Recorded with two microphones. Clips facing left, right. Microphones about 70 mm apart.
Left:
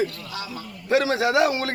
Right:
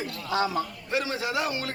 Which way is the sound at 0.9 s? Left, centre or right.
Left.